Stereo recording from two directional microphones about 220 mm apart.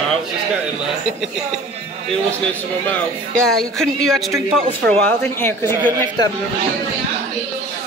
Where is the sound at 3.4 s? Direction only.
Centre (ahead or behind).